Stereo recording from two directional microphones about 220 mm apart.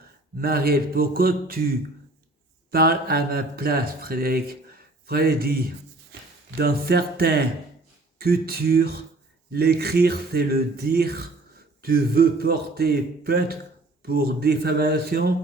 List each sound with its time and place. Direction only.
0.3 s speech: 45° right (ahead or behind)